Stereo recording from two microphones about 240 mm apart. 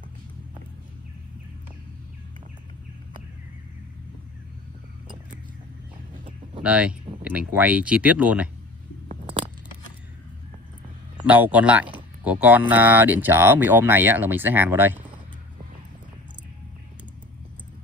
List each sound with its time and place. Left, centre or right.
6.6 s speech: centre
9.1 s a sound: right
11.2 s speech: centre